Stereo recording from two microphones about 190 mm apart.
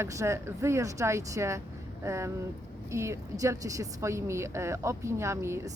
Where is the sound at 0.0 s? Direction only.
15° right (ahead or behind).